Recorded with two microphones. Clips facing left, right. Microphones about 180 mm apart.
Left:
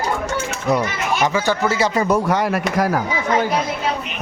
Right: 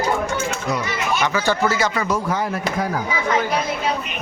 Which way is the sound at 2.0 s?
65° left (ahead or behind).